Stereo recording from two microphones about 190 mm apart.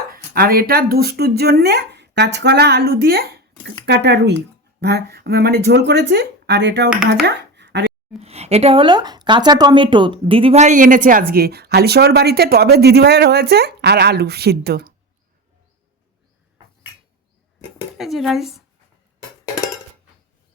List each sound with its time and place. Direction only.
0.1 s speech: 50° right (ahead or behind)
7.3 s a sound: 65° right (ahead or behind)
8.2 s a woman's voice: 35° right (ahead or behind); by 14.9 s 55° right (ahead or behind)
17.9 s speech: centre (ahead or behind)